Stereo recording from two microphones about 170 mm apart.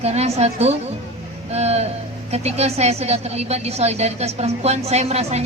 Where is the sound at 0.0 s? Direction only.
40° right (ahead or behind).